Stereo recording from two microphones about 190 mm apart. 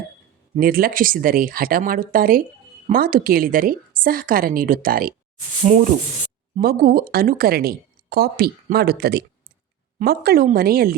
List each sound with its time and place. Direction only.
0.5 s speech: 50° right (ahead or behind)
5.6 s speech: 40° right (ahead or behind)
6.6 s speech: 50° right (ahead or behind)